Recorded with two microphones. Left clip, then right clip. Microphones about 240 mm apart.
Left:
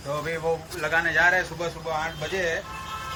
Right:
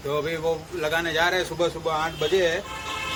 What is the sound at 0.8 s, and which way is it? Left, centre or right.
A man's voice, centre.